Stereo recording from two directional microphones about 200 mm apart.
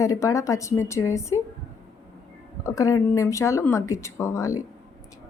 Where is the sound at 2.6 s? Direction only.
15° left (ahead or behind).